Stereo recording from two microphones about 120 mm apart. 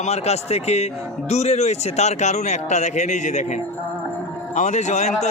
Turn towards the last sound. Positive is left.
turn(degrees=70)  # may be behind; listen again after turning